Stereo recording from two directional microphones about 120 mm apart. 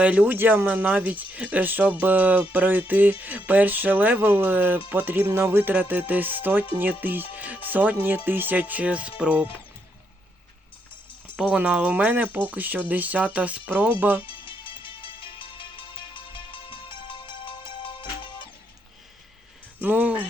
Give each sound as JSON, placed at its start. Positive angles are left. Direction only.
{"t": 0.0, "sound": "speech", "side_deg": -10}
{"t": 11.3, "sound": "speech", "side_deg": -10}
{"t": 14.2, "sound": "music", "side_deg": 45}
{"t": 19.8, "sound": "speech", "side_deg": -15}